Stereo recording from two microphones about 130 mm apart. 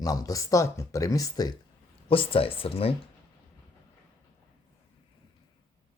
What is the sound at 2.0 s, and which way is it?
Speech, 45° left (ahead or behind).